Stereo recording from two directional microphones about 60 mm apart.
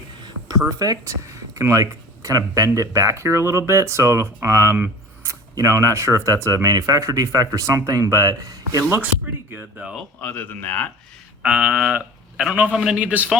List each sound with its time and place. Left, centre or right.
0.8 s speech: right
1.5 s speech: right
2.7 s speech: right
8.8 s speech: right
10.2 s a man's voice: left
11.4 s a sound: centre
12.5 s a man's voice: right